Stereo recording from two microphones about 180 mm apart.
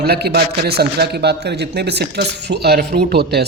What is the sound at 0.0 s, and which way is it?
Speech, 60° right (ahead or behind).